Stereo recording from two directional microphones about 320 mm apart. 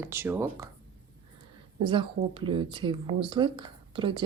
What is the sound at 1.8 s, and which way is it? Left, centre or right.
Speech, centre.